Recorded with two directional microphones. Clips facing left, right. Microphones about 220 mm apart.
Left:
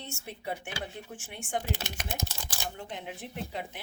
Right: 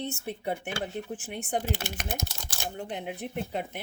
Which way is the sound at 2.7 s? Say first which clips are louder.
Right 5 dB; 40° right (ahead or behind).